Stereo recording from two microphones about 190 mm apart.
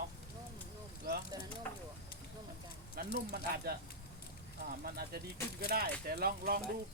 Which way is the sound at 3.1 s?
55° right (ahead or behind).